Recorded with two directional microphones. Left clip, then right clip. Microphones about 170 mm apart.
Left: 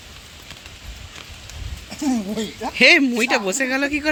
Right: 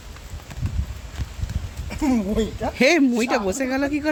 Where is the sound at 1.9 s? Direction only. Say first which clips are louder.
Right 1 dB; 40° right (ahead or behind).